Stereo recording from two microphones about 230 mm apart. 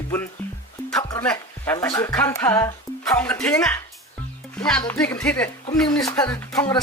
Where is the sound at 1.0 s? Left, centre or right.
Centre.